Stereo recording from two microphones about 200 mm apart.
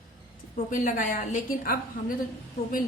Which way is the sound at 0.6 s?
40° left (ahead or behind).